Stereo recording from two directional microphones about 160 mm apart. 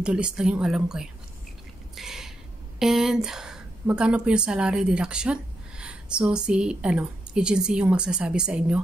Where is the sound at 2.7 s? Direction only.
Centre (ahead or behind).